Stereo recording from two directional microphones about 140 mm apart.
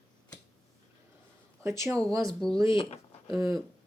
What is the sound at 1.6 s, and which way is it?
Speech, 20° right (ahead or behind).